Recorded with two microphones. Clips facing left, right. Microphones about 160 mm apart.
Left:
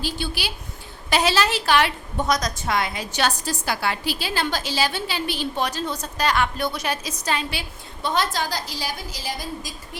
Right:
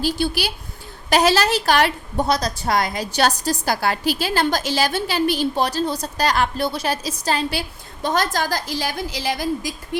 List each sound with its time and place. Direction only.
0.0 s a woman's voice: 40° right (ahead or behind); by 9.5 s 70° right (ahead or behind)